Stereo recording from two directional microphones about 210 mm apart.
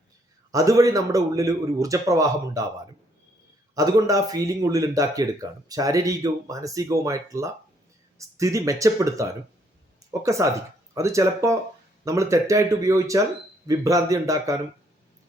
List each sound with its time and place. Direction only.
0.5 s speech: 15° right (ahead or behind)
3.8 s speech: 15° right (ahead or behind)